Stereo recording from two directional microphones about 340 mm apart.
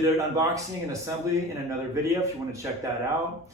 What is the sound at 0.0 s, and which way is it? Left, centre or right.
Speech, centre.